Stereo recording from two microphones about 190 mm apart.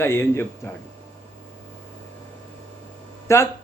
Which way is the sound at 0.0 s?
10° left (ahead or behind).